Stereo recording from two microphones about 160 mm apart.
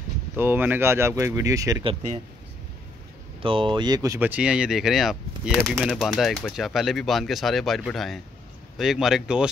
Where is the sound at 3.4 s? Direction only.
35° right (ahead or behind).